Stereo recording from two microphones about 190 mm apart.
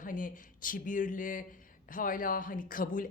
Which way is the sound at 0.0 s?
45° left (ahead or behind).